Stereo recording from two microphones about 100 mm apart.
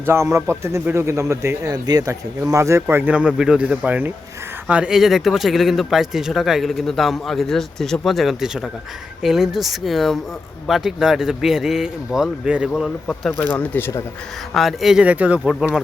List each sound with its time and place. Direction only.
0.0 s speech: 25° right (ahead or behind)
1.7 s speech: 40° right (ahead or behind); by 12.9 s 5° right (ahead or behind)
13.4 s speech: 15° left (ahead or behind)
14.5 s speech: centre (ahead or behind)